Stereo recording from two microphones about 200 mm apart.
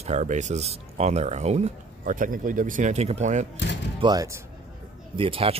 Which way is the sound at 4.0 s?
20° right (ahead or behind).